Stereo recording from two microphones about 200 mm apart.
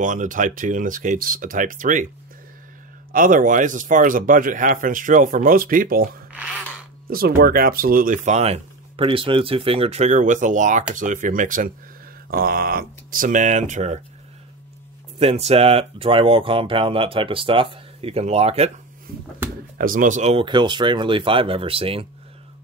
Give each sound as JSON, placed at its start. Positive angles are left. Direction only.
{"t": 0.0, "sound": "speech", "side_deg": -40}
{"t": 3.1, "sound": "speech", "side_deg": -45}
{"t": 7.1, "sound": "speech", "side_deg": -45}
{"t": 15.1, "sound": "speech", "side_deg": -30}
{"t": 19.8, "sound": "speech", "side_deg": -40}